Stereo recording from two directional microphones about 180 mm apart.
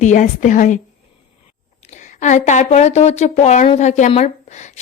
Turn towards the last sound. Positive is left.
turn(degrees=40)  # may be behind; listen again after turning